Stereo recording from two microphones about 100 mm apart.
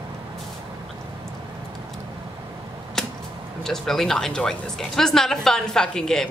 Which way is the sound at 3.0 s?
5° left (ahead or behind).